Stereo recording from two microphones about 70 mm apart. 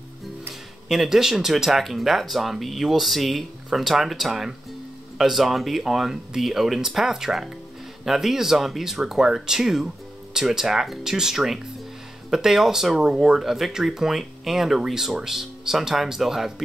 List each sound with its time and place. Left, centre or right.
0.8 s speech: centre